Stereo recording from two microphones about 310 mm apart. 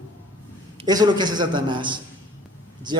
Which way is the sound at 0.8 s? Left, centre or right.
Centre.